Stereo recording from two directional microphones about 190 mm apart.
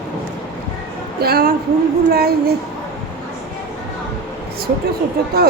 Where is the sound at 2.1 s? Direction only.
55° right (ahead or behind).